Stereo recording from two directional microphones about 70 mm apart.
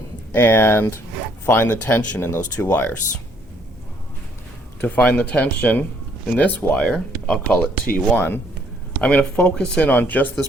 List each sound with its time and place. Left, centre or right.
0.3 s speech: left
1.7 s speech: left
4.8 s speech: left
6.7 s speech: centre; by 8.4 s left
9.0 s speech: centre